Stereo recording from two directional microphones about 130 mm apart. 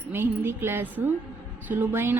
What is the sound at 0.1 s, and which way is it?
A woman's voice, 15° right (ahead or behind).